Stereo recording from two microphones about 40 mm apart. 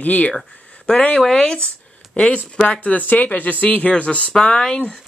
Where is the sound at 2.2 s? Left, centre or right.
Left.